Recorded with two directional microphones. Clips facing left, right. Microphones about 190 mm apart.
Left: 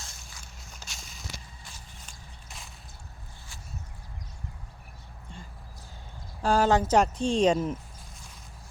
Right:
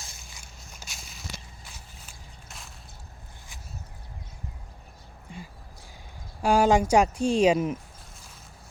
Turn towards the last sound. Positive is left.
turn(degrees=-10)  # may be behind; listen again after turning